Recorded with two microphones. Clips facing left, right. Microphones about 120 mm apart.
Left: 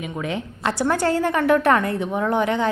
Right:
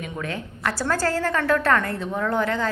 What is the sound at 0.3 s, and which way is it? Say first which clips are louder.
A woman's voice: left 4 dB; 20° left (ahead or behind).